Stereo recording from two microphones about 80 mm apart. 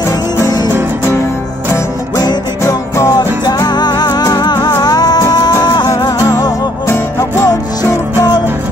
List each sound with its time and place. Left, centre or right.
2.6 s music: left
6.9 s music: left